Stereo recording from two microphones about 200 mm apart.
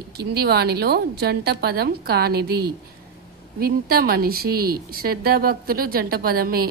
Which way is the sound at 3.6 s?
50° right (ahead or behind).